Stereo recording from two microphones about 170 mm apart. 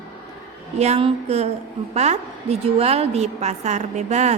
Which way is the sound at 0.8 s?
40° right (ahead or behind).